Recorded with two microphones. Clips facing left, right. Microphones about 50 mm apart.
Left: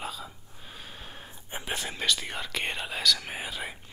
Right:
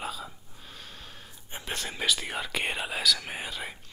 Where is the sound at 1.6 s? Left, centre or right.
Centre.